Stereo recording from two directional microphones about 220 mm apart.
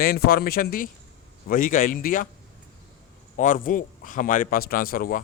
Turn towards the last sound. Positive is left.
turn(degrees=40)  # may be behind; listen again after turning